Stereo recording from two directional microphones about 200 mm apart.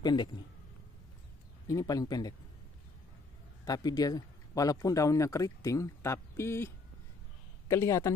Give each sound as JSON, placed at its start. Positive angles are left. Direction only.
{"t": 0.0, "sound": "speech", "side_deg": 20}
{"t": 1.7, "sound": "speech", "side_deg": 15}
{"t": 3.6, "sound": "speech", "side_deg": 20}